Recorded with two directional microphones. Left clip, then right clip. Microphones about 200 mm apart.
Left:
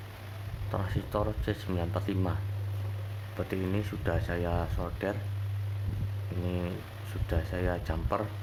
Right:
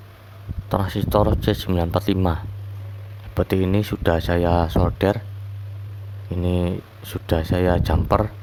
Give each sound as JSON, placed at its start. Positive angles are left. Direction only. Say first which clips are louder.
{"t": 0.7, "sound": "speech", "louder": "right 13 dB", "side_deg": -45}
{"t": 6.4, "sound": "speech", "louder": "right 12 dB", "side_deg": -50}